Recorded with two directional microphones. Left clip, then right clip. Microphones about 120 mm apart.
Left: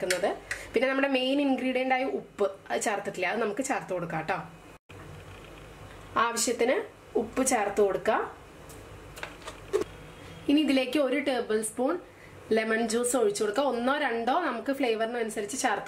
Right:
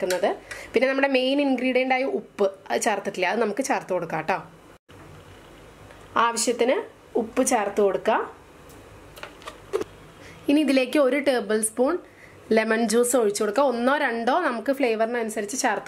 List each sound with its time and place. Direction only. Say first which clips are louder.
0.7 s a woman's voice: right 5 dB; 35° right (ahead or behind)
6.1 s a woman's voice: right 5 dB; 35° right (ahead or behind)
9.4 s tick-tock: right 1 dB; 15° right (ahead or behind)
10.4 s a woman's voice: right 4 dB; 45° right (ahead or behind)